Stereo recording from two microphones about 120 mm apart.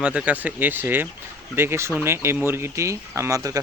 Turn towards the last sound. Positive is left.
turn(degrees=-30)  # may be behind; listen again after turning